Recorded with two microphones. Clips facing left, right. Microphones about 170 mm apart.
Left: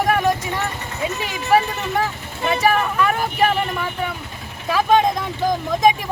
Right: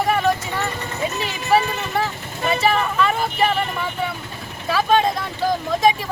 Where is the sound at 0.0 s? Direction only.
15° left (ahead or behind).